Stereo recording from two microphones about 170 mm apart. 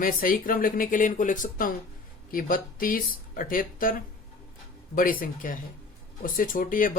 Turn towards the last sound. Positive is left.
turn(degrees=55)  # may be behind; listen again after turning